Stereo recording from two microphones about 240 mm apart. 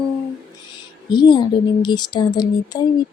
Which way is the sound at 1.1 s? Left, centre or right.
Centre.